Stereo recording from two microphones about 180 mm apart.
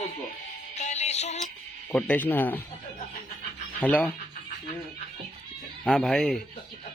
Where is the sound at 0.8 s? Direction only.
40° left (ahead or behind).